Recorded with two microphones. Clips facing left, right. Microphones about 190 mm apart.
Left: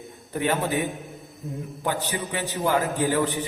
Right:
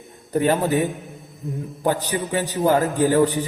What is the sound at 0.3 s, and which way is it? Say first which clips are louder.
Speech: right 6 dB; 40° right (ahead or behind).